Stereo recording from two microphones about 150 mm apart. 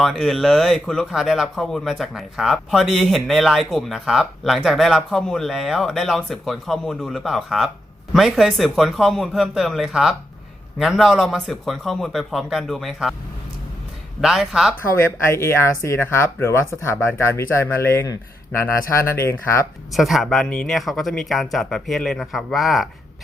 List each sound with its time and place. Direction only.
0.0 s speech: centre (ahead or behind)
14.2 s speech: 5° right (ahead or behind)
15.2 s speech: 15° left (ahead or behind)
19.9 s speech: centre (ahead or behind)